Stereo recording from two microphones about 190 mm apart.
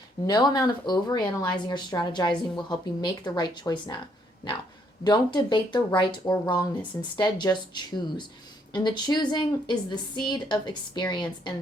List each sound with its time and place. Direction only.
0.3 s speech: 20° left (ahead or behind)
5.0 s speech: 25° left (ahead or behind)